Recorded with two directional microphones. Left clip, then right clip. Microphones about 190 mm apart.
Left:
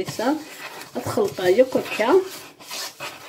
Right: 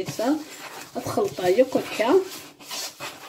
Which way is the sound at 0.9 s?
15° left (ahead or behind).